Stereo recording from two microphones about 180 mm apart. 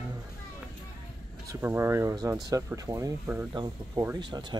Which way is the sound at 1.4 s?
15° right (ahead or behind).